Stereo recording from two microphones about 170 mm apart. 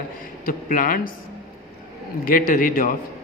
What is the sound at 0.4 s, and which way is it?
Speech, 55° left (ahead or behind).